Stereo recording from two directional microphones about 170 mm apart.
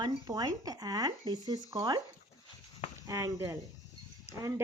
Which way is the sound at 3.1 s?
15° right (ahead or behind).